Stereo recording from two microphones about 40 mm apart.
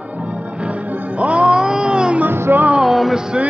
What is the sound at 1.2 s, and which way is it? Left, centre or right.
Music, right.